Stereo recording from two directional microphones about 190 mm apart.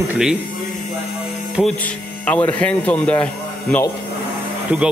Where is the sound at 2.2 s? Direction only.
5° left (ahead or behind).